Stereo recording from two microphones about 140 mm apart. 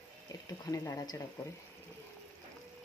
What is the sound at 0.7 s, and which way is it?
Speech, 25° left (ahead or behind).